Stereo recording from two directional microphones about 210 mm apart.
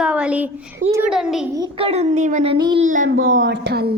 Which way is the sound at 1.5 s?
20° right (ahead or behind).